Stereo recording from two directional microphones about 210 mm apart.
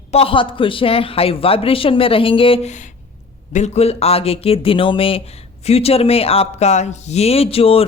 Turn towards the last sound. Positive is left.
turn(degrees=25)  # may be behind; listen again after turning